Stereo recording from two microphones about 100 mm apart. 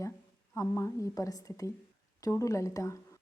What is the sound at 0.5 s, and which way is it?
Speech, 30° left (ahead or behind).